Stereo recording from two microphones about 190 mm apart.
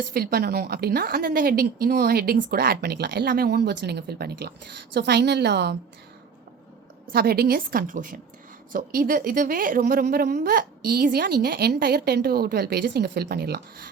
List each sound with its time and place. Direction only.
0.1 s a woman's voice: 55° right (ahead or behind)
7.1 s a woman's voice: 55° right (ahead or behind)